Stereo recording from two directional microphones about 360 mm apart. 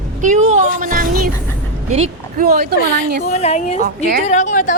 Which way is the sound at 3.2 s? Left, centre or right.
Centre.